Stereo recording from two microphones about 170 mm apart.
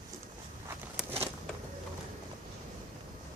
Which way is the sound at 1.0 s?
5° right (ahead or behind).